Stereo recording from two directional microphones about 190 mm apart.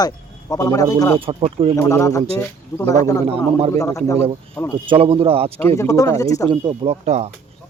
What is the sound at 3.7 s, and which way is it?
Speech, 15° left (ahead or behind).